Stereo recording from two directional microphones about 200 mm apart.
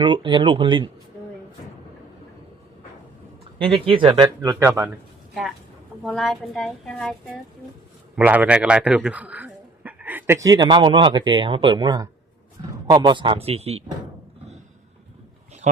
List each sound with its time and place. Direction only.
0.0 s speech: 25° right (ahead or behind)
3.6 s speech: 25° right (ahead or behind)
6.0 s a woman's voice: centre (ahead or behind)
8.1 s a man's voice: 10° right (ahead or behind); by 13.8 s 30° right (ahead or behind)